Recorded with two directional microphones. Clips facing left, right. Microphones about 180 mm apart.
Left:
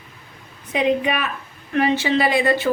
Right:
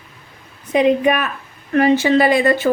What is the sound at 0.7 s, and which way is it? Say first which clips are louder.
A woman's voice: right 5 dB; 45° right (ahead or behind).